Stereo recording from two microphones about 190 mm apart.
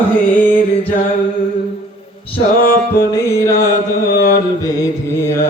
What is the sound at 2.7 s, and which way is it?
Music, 50° left (ahead or behind).